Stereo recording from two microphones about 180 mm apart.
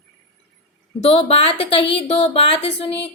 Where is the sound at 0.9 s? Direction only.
35° left (ahead or behind).